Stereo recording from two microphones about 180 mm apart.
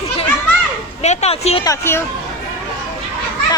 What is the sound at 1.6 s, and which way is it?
Speech, 15° left (ahead or behind).